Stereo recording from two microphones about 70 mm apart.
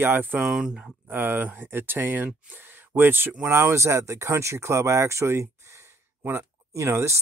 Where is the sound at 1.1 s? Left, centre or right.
Right.